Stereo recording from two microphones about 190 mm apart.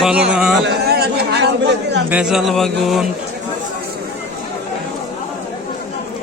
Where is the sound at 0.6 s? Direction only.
55° right (ahead or behind).